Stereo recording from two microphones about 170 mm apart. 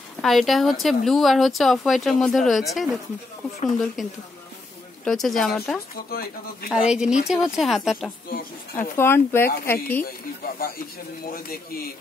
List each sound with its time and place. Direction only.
0.2 s speech: centre (ahead or behind)
6.0 s speech: 65° left (ahead or behind)
6.7 s speech: 5° right (ahead or behind)
8.3 s speech: 55° left (ahead or behind)
8.9 s speech: 15° left (ahead or behind)